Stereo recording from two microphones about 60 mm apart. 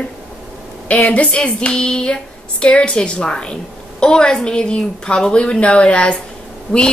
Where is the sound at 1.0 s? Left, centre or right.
Left.